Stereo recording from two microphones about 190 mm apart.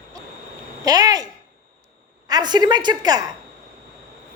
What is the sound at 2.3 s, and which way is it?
Speech, 20° right (ahead or behind).